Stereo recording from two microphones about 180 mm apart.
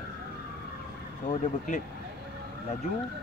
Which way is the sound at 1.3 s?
40° left (ahead or behind).